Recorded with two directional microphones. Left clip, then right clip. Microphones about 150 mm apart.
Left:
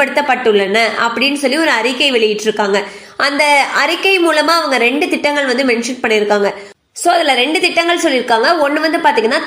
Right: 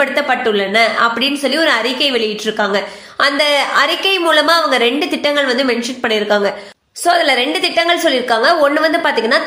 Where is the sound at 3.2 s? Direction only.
15° left (ahead or behind).